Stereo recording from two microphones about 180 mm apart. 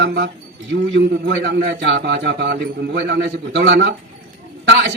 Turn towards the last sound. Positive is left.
turn(degrees=-80)